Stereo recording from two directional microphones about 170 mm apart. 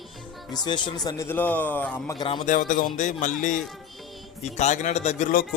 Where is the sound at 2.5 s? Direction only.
50° left (ahead or behind).